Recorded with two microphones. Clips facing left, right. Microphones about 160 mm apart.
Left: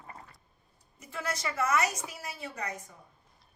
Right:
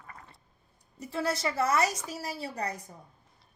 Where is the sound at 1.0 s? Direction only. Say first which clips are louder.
Right 5 dB; 30° right (ahead or behind).